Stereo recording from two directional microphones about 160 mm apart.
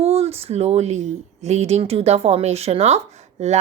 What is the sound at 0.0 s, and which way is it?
A woman's voice, 40° right (ahead or behind).